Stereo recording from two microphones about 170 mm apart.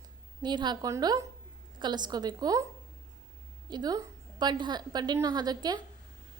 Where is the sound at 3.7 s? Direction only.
20° right (ahead or behind).